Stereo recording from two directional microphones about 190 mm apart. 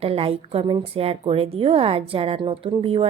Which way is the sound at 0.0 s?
30° right (ahead or behind).